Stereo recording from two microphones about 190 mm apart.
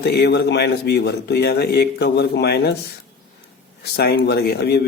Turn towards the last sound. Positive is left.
turn(degrees=60)  # may be behind; listen again after turning